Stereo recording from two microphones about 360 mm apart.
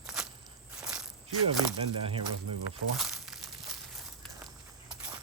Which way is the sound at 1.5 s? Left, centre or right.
Centre.